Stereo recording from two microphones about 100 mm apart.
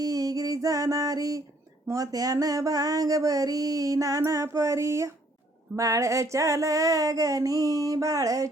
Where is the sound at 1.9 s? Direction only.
35° right (ahead or behind).